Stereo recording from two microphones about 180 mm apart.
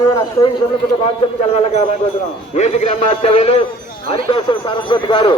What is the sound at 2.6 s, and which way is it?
A man's voice, 40° left (ahead or behind).